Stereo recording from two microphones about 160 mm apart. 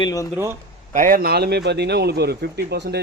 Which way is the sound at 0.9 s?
60° right (ahead or behind).